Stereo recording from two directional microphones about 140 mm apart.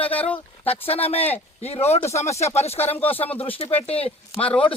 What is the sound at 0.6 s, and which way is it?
Speech, 45° left (ahead or behind).